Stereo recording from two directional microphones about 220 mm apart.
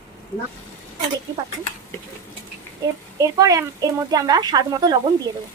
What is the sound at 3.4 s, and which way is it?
A woman's voice, 15° right (ahead or behind).